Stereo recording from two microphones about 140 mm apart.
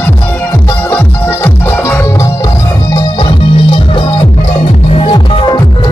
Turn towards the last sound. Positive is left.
turn(degrees=40)  # may be behind; listen again after turning